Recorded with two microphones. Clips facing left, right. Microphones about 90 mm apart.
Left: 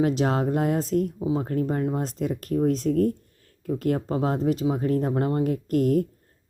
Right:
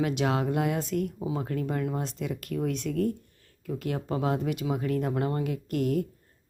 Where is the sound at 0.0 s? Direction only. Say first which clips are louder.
Left 4 dB; 35° left (ahead or behind).